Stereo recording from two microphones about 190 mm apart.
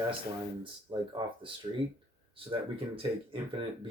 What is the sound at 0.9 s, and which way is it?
Speech, 25° right (ahead or behind).